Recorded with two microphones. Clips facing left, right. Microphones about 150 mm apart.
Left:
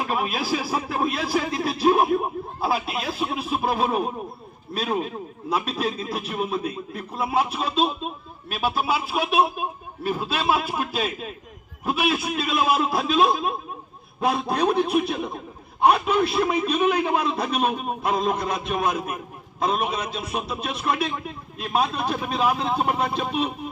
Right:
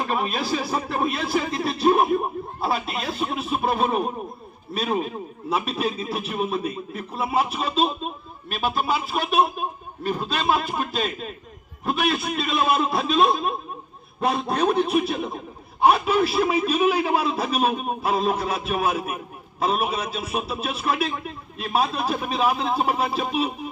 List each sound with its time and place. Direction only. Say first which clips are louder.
0.0 s a man's voice: right 1 dB; 5° left (ahead or behind)